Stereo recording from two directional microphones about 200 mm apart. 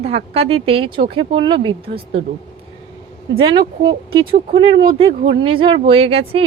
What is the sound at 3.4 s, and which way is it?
Speech, 25° right (ahead or behind).